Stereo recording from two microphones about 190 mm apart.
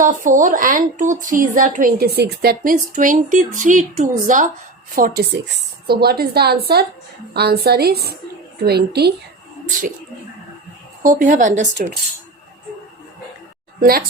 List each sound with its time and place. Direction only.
0.0 s a woman's voice: 45° right (ahead or behind)
11.0 s speech: 45° right (ahead or behind)
13.7 s a woman's voice: 50° right (ahead or behind)